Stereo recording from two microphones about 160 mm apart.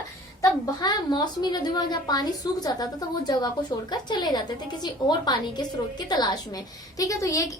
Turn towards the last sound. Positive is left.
turn(degrees=20)  # may be behind; listen again after turning